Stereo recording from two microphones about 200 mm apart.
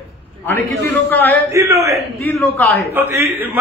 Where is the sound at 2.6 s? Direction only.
10° left (ahead or behind).